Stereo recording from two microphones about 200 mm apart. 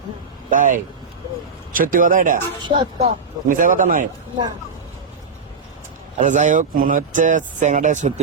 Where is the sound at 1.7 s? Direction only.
45° right (ahead or behind).